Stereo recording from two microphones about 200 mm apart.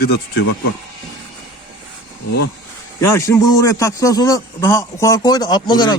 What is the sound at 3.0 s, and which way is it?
A man's voice, 15° left (ahead or behind).